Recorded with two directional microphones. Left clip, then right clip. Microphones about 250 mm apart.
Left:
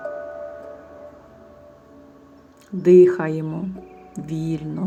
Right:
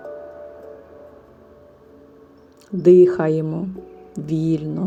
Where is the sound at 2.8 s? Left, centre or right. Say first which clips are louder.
Right 1 dB; centre.